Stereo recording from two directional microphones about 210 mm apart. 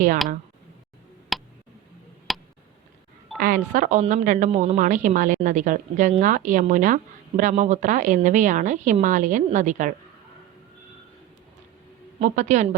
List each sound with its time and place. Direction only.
1.3 s tick: centre (ahead or behind)
3.3 s speech: 45° right (ahead or behind)
12.2 s speech: 35° right (ahead or behind)